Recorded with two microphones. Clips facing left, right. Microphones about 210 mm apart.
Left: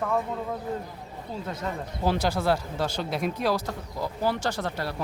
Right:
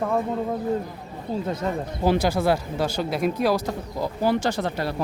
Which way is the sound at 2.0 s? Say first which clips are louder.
Right 4 dB; 15° right (ahead or behind).